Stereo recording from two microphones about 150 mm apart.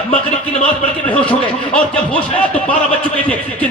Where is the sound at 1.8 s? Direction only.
5° left (ahead or behind).